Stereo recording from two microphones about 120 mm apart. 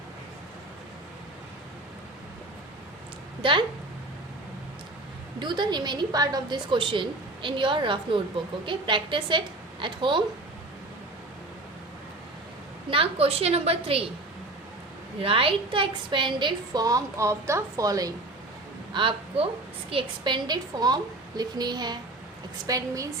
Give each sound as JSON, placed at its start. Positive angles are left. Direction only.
{"t": 3.4, "sound": "a woman's voice", "side_deg": -45}
{"t": 5.4, "sound": "a woman's voice", "side_deg": -40}
{"t": 12.9, "sound": "a woman's voice", "side_deg": -50}
{"t": 15.2, "sound": "a woman's voice", "side_deg": -50}
{"t": 18.9, "sound": "a woman's voice", "side_deg": -45}